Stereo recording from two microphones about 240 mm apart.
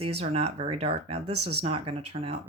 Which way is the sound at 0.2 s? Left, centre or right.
Right.